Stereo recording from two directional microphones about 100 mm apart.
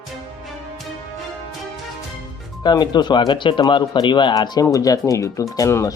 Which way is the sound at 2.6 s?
45° left (ahead or behind).